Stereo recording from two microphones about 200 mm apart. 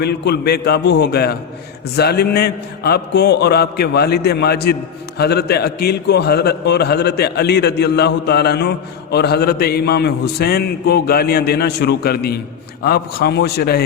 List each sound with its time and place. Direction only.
0.0 s a man's voice: 55° left (ahead or behind)